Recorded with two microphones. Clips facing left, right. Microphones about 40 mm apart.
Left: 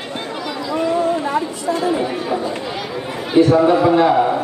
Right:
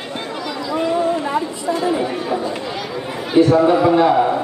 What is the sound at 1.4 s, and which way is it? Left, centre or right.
Speech, centre.